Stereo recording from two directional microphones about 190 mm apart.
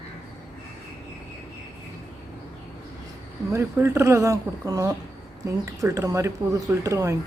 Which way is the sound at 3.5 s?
15° right (ahead or behind).